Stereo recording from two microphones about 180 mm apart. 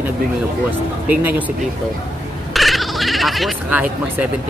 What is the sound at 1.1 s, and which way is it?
Speech, 10° right (ahead or behind).